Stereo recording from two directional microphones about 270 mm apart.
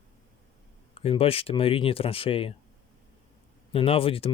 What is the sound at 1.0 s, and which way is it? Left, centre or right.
Speech, left.